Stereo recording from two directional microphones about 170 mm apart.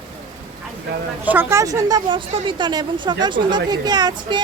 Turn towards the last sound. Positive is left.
turn(degrees=-25)  # may be behind; listen again after turning